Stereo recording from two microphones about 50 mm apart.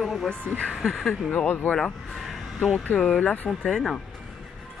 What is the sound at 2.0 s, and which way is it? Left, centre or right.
Speech, centre.